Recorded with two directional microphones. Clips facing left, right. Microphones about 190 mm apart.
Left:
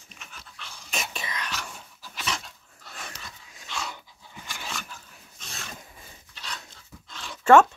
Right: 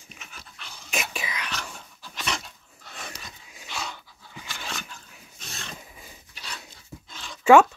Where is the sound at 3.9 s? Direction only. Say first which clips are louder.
Right 1 dB; 20° left (ahead or behind).